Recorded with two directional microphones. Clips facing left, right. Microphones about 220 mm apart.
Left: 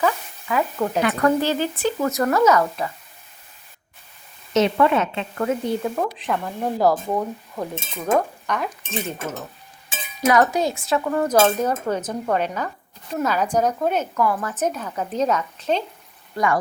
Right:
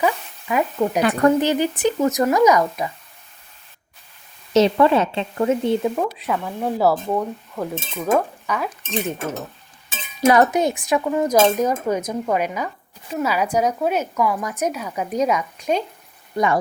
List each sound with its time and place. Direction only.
0.0 s speech: 15° right (ahead or behind)
4.5 s speech: 30° right (ahead or behind)
6.0 s speech: 5° right (ahead or behind)
10.2 s speech: 25° right (ahead or behind)